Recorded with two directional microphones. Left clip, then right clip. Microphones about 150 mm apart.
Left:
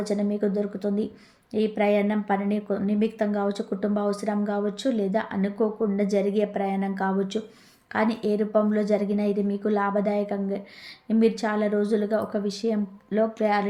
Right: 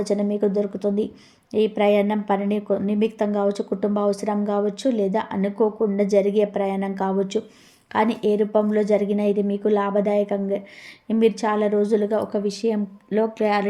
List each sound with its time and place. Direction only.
0.0 s a woman's voice: 20° right (ahead or behind)